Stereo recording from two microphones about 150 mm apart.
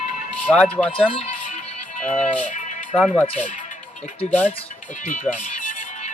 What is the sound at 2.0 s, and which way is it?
Music, 55° left (ahead or behind).